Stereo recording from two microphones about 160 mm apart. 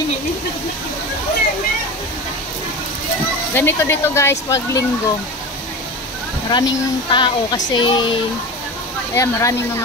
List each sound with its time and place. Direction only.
3.5 s speech: 15° left (ahead or behind)
6.5 s speech: 30° left (ahead or behind)
9.1 s speech: 15° left (ahead or behind)